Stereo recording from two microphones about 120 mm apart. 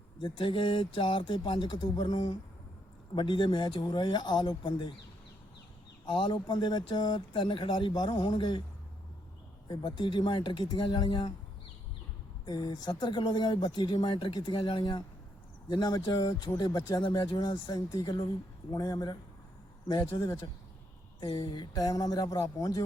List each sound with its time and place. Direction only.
0.2 s speech: 45° left (ahead or behind)
6.1 s speech: 40° left (ahead or behind)
9.6 s speech: 40° left (ahead or behind)
12.5 s speech: 35° left (ahead or behind)